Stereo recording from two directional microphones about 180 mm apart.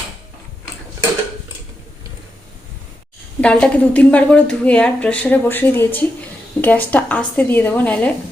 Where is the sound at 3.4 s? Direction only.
5° left (ahead or behind).